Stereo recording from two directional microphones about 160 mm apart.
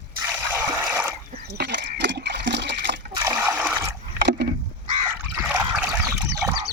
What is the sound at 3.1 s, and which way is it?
Water, 20° right (ahead or behind).